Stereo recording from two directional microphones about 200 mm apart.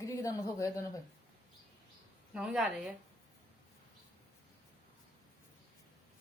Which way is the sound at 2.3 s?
5° right (ahead or behind).